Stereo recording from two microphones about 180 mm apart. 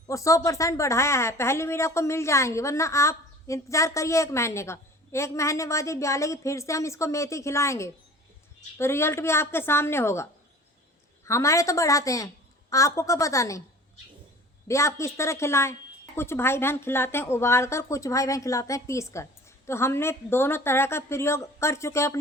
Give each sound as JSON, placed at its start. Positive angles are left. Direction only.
{"t": 0.1, "sound": "a woman's voice", "side_deg": 15}
{"t": 11.3, "sound": "a woman's voice", "side_deg": 15}
{"t": 14.7, "sound": "a woman's voice", "side_deg": 15}